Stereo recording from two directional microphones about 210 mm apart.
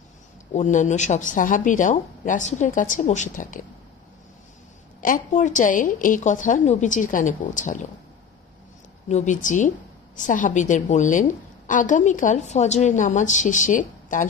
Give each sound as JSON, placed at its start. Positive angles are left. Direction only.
{"t": 0.5, "sound": "a woman's voice", "side_deg": 35}
{"t": 5.0, "sound": "a woman's voice", "side_deg": 40}
{"t": 9.1, "sound": "a woman's voice", "side_deg": 35}